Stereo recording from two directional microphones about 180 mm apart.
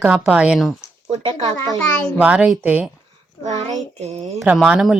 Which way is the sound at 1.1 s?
30° right (ahead or behind).